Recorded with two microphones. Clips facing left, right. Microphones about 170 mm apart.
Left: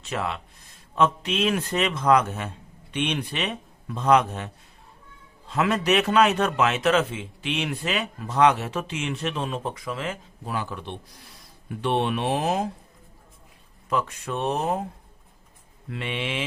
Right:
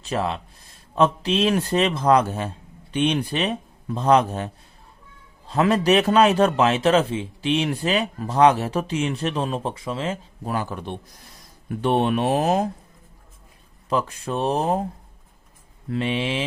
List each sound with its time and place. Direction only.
0.0 s a man's voice: 35° right (ahead or behind)
10.4 s speech: 45° right (ahead or behind)
13.9 s a man's voice: 30° right (ahead or behind)
15.9 s a man's voice: 35° right (ahead or behind)